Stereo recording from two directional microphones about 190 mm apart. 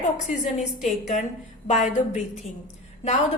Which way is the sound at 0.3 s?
40° left (ahead or behind).